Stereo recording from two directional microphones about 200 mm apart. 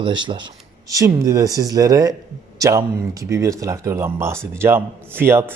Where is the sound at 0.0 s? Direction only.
25° right (ahead or behind).